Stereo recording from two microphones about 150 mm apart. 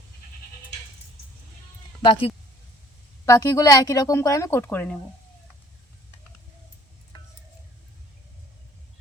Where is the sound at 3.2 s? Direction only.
20° left (ahead or behind).